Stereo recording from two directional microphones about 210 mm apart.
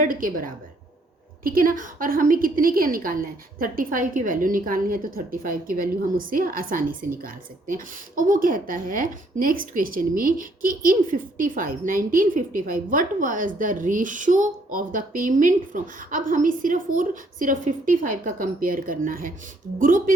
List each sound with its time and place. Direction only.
0.0 s a woman's voice: 40° right (ahead or behind)